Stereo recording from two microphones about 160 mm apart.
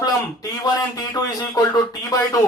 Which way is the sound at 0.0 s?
25° left (ahead or behind).